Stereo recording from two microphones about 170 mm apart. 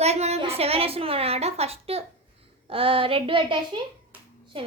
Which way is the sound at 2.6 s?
30° right (ahead or behind).